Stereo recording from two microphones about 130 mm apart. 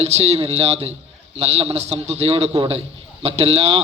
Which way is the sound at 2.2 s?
45° right (ahead or behind).